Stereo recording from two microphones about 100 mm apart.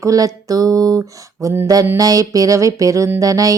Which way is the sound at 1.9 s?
35° right (ahead or behind).